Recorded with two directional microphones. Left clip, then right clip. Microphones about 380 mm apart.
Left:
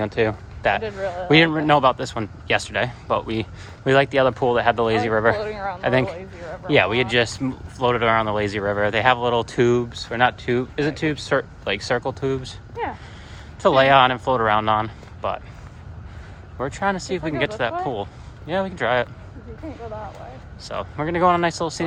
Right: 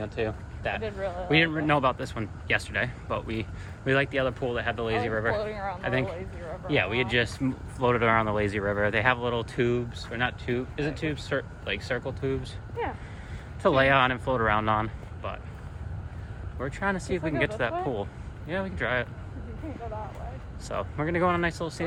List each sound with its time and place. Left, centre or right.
0.0 s speech: centre
1.3 s speech: centre
5.4 s a man's voice: left
5.8 s speech: centre
12.8 s vehicle: left
13.6 s speech: centre
16.6 s speech: centre
20.7 s speech: centre